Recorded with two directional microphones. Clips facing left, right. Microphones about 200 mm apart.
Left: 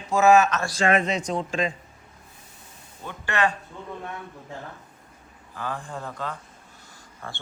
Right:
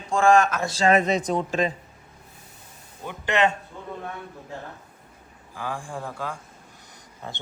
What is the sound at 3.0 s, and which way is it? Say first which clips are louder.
Speech: right 3 dB; 20° right (ahead or behind).